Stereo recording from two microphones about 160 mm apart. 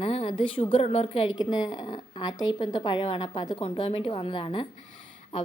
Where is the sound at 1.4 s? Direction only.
25° left (ahead or behind).